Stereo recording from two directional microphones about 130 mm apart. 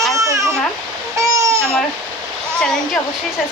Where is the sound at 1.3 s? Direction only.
25° right (ahead or behind).